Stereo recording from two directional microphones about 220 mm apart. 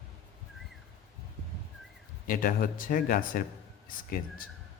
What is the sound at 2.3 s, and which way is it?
Speech, 40° left (ahead or behind).